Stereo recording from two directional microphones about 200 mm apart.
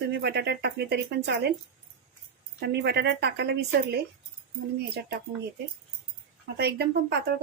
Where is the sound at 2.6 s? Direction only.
55° right (ahead or behind).